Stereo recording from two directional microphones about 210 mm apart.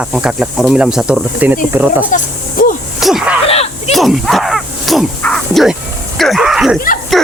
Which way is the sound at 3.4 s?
30° left (ahead or behind).